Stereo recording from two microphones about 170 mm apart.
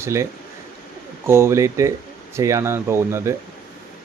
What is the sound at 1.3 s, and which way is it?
Speech, 15° right (ahead or behind).